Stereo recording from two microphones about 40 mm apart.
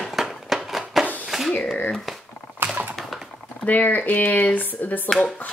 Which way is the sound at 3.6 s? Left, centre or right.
Left.